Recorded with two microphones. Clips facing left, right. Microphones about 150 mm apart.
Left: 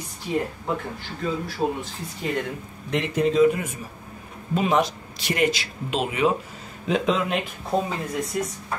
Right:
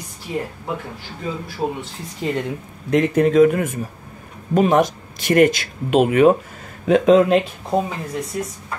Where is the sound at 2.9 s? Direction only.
55° right (ahead or behind).